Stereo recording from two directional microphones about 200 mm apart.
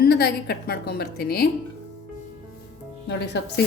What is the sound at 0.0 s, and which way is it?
A woman's voice, 55° left (ahead or behind).